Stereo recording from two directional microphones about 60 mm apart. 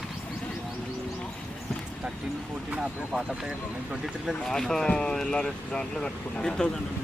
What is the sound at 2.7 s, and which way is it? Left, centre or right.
Speech, centre.